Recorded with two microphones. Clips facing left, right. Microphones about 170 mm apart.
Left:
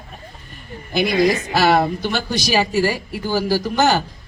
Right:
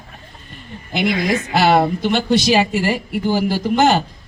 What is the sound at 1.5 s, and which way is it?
Speech, 20° right (ahead or behind).